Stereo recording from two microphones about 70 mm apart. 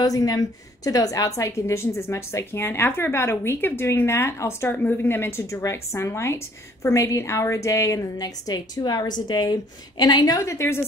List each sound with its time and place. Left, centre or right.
0.0 s a woman's voice: left
5.5 s a woman's voice: left
10.4 s a woman's voice: left